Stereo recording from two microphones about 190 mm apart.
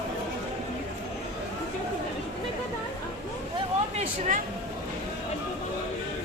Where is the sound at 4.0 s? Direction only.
40° right (ahead or behind).